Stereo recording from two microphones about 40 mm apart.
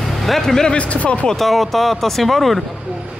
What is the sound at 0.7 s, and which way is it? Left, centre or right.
Speech, left.